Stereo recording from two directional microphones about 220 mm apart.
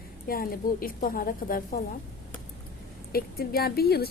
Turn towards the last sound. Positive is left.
turn(degrees=45)  # may be behind; listen again after turning